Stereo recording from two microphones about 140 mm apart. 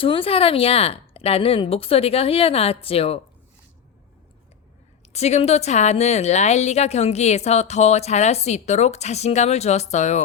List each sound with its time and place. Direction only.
0.0 s a woman's voice: 40° left (ahead or behind)
5.1 s a woman's voice: 50° left (ahead or behind)